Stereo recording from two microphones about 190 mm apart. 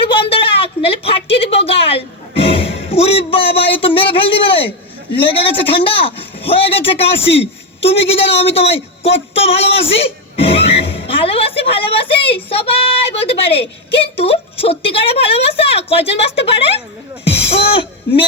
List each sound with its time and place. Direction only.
0.2 s a sound: 30° left (ahead or behind)
0.9 s a woman's voice: 30° left (ahead or behind)
17.2 s speech: 65° left (ahead or behind)